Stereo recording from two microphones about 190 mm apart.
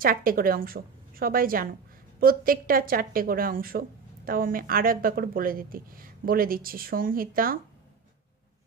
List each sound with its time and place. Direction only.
0.0 s speech: 50° right (ahead or behind)